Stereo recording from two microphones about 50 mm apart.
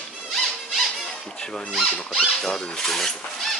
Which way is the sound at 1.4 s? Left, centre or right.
Centre.